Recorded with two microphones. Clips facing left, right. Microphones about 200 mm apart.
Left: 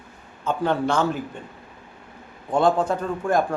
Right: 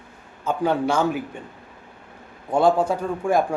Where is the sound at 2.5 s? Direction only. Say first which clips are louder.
Right 1 dB; 10° right (ahead or behind).